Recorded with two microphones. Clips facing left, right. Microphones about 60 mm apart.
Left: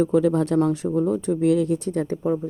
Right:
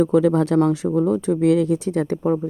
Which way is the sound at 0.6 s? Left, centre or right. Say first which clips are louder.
Right 3 dB; right.